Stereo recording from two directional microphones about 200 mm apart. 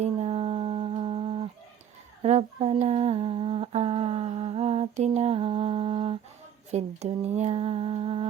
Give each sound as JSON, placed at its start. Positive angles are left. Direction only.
{"t": 0.0, "sound": "humming", "side_deg": -30}
{"t": 6.7, "sound": "speech", "side_deg": -35}